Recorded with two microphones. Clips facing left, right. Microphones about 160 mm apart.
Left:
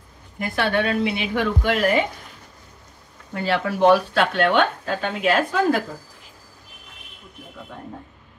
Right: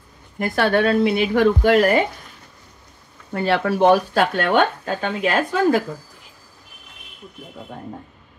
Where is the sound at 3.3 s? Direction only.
55° right (ahead or behind).